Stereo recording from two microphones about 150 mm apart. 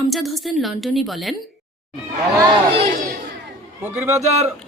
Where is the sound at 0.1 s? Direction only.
Centre (ahead or behind).